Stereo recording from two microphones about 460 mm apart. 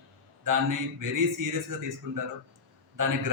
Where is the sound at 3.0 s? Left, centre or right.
Right.